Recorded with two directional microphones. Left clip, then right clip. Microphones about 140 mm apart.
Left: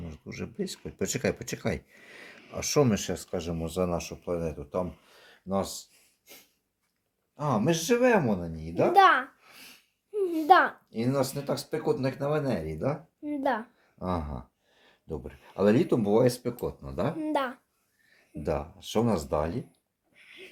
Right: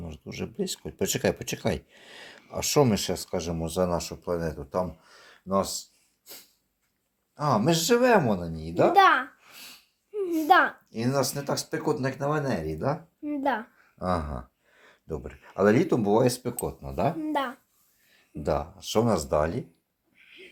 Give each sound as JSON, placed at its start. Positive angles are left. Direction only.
{"t": 0.1, "sound": "speech", "side_deg": -15}
{"t": 7.4, "sound": "speech", "side_deg": -35}
{"t": 8.9, "sound": "a child's voice", "side_deg": 20}
{"t": 10.9, "sound": "speech", "side_deg": -35}
{"t": 13.2, "sound": "a child's voice", "side_deg": 20}
{"t": 14.0, "sound": "speech", "side_deg": -20}
{"t": 17.2, "sound": "a child's voice", "side_deg": 30}
{"t": 18.4, "sound": "speech", "side_deg": -20}
{"t": 20.1, "sound": "owl", "side_deg": 35}